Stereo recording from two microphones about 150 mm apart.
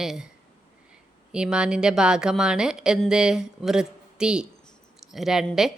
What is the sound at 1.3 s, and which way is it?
A woman's voice, 5° right (ahead or behind).